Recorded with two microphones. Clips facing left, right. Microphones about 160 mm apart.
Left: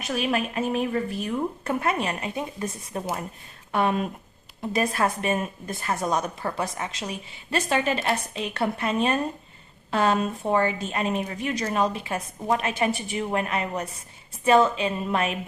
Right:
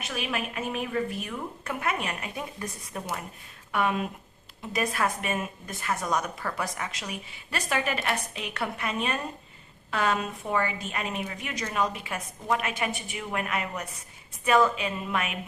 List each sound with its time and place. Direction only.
0.1 s a woman's voice: 40° left (ahead or behind)